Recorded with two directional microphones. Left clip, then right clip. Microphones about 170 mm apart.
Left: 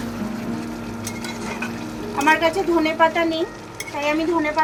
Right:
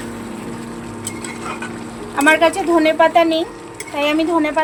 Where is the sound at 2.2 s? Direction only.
60° right (ahead or behind).